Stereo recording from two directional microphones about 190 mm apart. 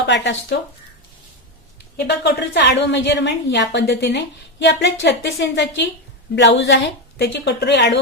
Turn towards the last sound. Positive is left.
turn(degrees=65)  # may be behind; listen again after turning